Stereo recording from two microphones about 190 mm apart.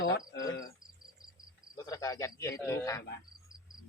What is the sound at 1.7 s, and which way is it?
Cricket, 20° left (ahead or behind).